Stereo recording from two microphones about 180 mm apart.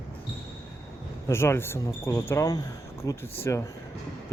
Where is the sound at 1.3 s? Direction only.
15° left (ahead or behind).